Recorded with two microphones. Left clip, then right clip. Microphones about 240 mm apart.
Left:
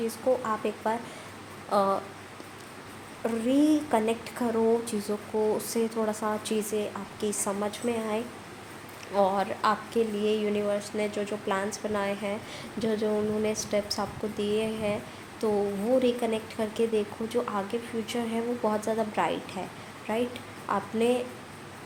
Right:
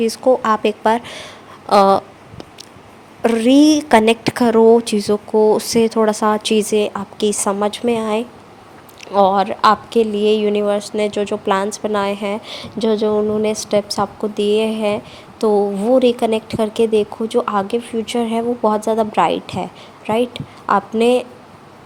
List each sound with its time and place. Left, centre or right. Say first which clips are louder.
0.1 s a woman's voice: right 13 dB; right
3.2 s a woman's voice: right 13 dB; right